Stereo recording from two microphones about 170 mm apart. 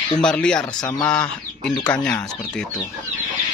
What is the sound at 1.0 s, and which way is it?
Speech, 5° left (ahead or behind).